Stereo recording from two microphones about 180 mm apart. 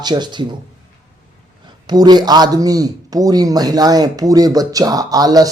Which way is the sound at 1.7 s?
20° right (ahead or behind).